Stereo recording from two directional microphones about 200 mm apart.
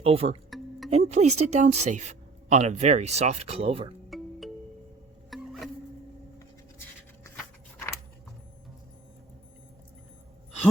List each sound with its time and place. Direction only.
0.0 s speech: 30° right (ahead or behind)
4.1 s music: centre (ahead or behind)